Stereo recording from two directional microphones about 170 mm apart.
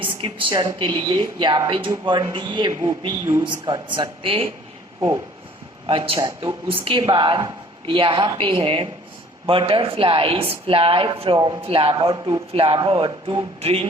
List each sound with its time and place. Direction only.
0.0 s a woman's voice: 30° right (ahead or behind)
4.9 s speech: 15° right (ahead or behind)
5.8 s a man's voice: 30° right (ahead or behind)